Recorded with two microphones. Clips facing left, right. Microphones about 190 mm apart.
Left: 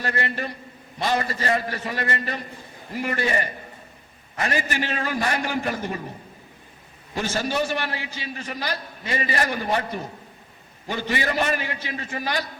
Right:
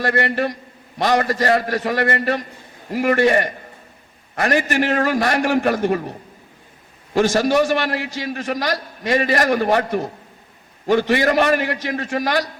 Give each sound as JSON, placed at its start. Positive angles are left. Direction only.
{"t": 0.0, "sound": "a man's voice", "side_deg": -75}